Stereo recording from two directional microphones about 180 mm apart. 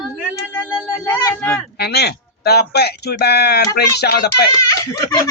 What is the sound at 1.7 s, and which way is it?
Speech, 65° left (ahead or behind).